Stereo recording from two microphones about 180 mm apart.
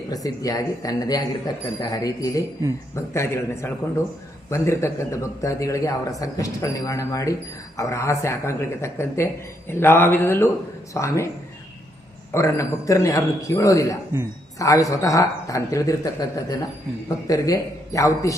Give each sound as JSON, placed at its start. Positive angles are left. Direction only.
{"t": 0.1, "sound": "speech", "side_deg": 20}
{"t": 12.3, "sound": "speech", "side_deg": 15}